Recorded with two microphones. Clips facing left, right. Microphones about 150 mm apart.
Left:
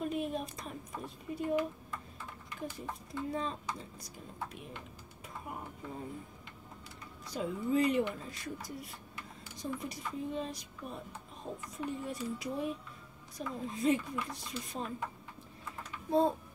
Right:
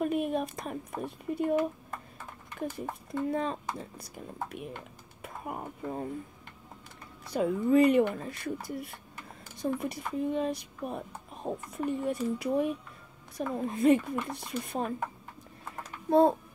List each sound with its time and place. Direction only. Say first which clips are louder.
0.0 s speech: right 6 dB; 60° right (ahead or behind)
7.2 s speech: right 8 dB; 60° right (ahead or behind)
15.6 s typing: right 5 dB; 50° right (ahead or behind)